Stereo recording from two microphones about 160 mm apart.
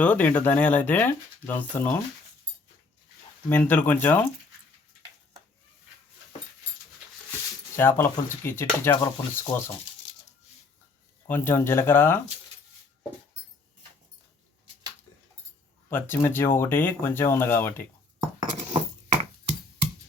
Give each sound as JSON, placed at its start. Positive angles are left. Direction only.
{"t": 0.0, "sound": "speech", "side_deg": 10}
{"t": 3.5, "sound": "speech", "side_deg": 10}
{"t": 7.8, "sound": "speech", "side_deg": 15}
{"t": 11.3, "sound": "speech", "side_deg": 15}
{"t": 15.9, "sound": "speech", "side_deg": 10}
{"t": 18.7, "sound": "a sound", "side_deg": -35}